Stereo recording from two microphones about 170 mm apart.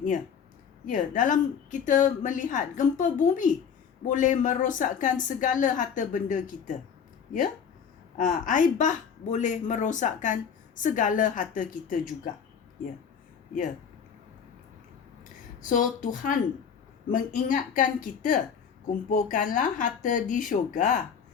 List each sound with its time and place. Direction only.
0.9 s a woman's voice: 50° left (ahead or behind)
8.1 s a woman's voice: 50° left (ahead or behind)
15.7 s a woman's voice: 50° left (ahead or behind)